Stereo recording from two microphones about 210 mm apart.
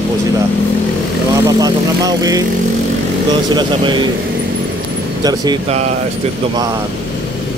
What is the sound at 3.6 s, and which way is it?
Speech, 20° right (ahead or behind).